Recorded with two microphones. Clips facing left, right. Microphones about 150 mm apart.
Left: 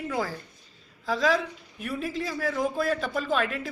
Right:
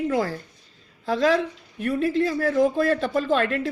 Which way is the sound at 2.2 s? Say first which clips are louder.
Right 7 dB; 50° right (ahead or behind).